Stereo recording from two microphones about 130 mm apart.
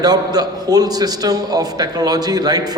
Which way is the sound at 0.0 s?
30° right (ahead or behind).